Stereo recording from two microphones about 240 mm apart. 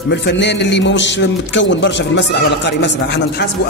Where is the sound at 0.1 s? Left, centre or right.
Left.